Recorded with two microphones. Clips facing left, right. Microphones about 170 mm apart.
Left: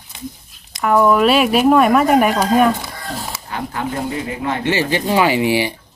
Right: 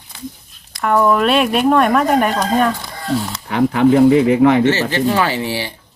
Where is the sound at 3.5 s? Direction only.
80° right.